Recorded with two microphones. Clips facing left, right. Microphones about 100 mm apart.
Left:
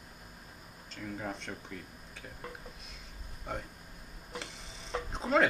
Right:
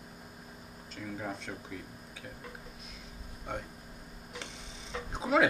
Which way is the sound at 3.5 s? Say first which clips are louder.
Right 1 dB; centre (ahead or behind).